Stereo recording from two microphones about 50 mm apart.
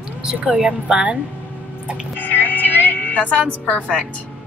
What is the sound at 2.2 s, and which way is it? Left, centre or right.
Music, left.